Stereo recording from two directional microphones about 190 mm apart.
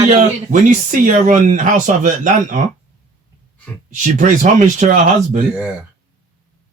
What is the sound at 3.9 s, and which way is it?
Speech, 40° right (ahead or behind).